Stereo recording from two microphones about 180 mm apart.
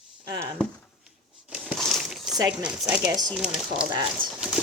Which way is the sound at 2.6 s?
5° right (ahead or behind).